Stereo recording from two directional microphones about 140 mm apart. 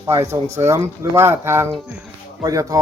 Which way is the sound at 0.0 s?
20° right (ahead or behind).